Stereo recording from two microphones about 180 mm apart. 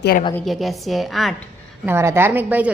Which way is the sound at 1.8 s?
15° right (ahead or behind).